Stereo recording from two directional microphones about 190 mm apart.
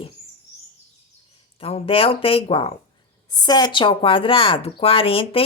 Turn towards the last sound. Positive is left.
turn(degrees=30)  # may be behind; listen again after turning